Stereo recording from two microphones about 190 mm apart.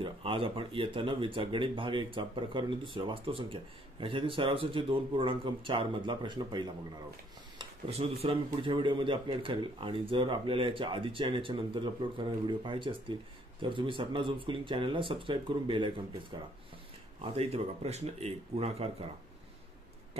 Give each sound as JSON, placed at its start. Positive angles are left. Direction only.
{"t": 0.0, "sound": "speech", "side_deg": -30}
{"t": 7.5, "sound": "a sound", "side_deg": -30}
{"t": 8.5, "sound": "speech", "side_deg": -25}